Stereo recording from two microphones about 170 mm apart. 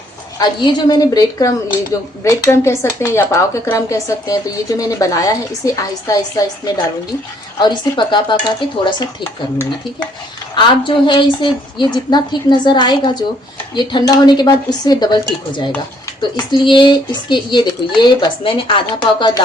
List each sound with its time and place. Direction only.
0.3 s speech: 25° left (ahead or behind)
10.5 s speech: 25° left (ahead or behind)